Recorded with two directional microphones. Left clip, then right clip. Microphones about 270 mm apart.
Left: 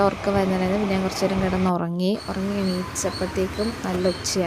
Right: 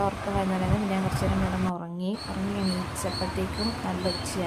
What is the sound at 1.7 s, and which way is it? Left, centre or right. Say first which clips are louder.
Speech: left 9 dB; left.